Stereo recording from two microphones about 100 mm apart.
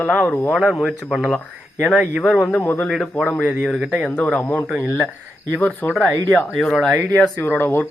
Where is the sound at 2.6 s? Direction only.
20° left (ahead or behind).